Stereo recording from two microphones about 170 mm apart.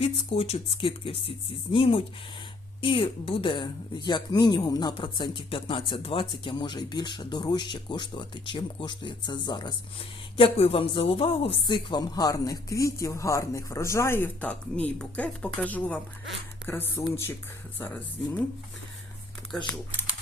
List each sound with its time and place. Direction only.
0.0 s a woman's voice: 35° left (ahead or behind); by 17.3 s 15° left (ahead or behind)
19.5 s speech: 5° left (ahead or behind)